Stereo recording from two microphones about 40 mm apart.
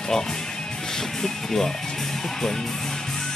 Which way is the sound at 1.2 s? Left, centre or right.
Centre.